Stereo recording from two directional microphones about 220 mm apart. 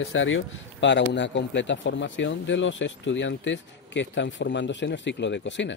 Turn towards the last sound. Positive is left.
turn(degrees=55)  # may be behind; listen again after turning